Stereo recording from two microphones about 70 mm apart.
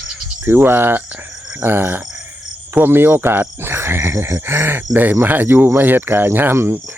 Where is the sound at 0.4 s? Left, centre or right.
Right.